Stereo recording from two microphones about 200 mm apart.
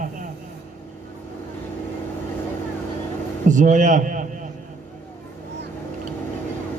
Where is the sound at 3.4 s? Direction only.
40° right (ahead or behind).